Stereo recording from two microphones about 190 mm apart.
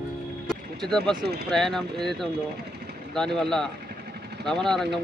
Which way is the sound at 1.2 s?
60° right (ahead or behind).